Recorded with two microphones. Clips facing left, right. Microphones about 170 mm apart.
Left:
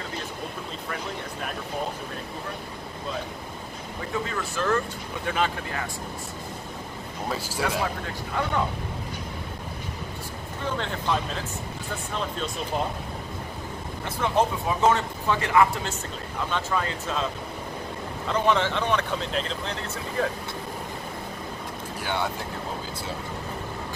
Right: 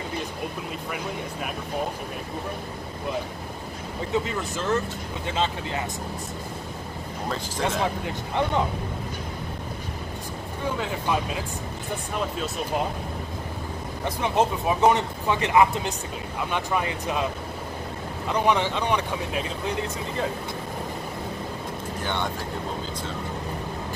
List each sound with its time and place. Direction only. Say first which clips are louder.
0.8 s speech: right 1 dB; 10° right (ahead or behind)
4.1 s speech: right 3 dB; 20° right (ahead or behind)
7.8 s speech: right 3 dB; 20° right (ahead or behind)
10.6 s speech: right 1 dB; 10° right (ahead or behind)
14.0 s speech: right 1 dB; 20° right (ahead or behind)
18.3 s speech: even; 15° right (ahead or behind)
22.0 s speech: left 1 dB; 5° left (ahead or behind)